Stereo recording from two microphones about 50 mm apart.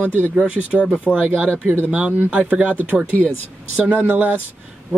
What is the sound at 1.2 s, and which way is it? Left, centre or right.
Speech, right.